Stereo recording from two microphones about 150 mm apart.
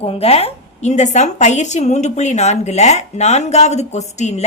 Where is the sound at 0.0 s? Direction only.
40° left (ahead or behind).